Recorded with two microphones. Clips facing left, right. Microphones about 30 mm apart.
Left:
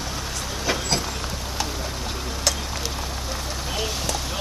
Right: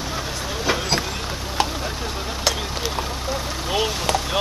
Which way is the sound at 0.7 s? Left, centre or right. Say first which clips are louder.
Right 3 dB; centre.